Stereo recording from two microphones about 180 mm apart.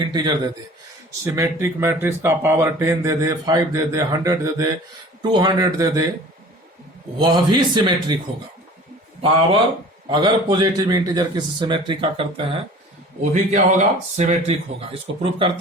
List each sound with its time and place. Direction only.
0.0 s speech: 25° right (ahead or behind)
7.2 s speech: 25° right (ahead or behind)
10.1 s speech: 25° right (ahead or behind)
13.3 s speech: 40° right (ahead or behind)